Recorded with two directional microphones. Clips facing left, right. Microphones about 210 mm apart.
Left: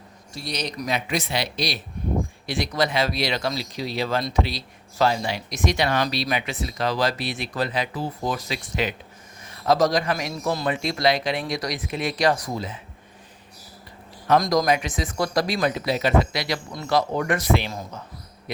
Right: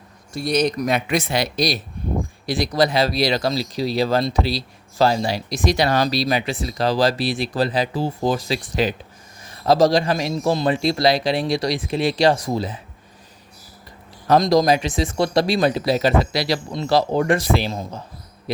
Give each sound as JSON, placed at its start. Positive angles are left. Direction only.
{"t": 0.3, "sound": "speech", "side_deg": -50}
{"t": 14.3, "sound": "speech", "side_deg": -25}